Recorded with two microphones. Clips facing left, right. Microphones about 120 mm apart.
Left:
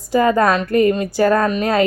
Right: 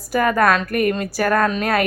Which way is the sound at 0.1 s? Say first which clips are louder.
Left 2 dB; 25° left (ahead or behind).